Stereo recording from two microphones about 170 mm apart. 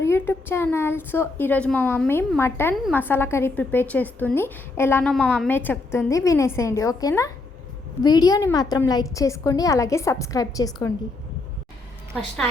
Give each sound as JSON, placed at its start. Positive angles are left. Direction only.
{"t": 0.0, "sound": "a woman's voice", "side_deg": 15}
{"t": 5.1, "sound": "a woman's voice", "side_deg": 0}
{"t": 5.5, "sound": "a woman's voice", "side_deg": 10}